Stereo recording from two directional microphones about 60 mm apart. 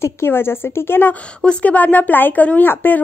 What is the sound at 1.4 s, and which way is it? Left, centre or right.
Speech, left.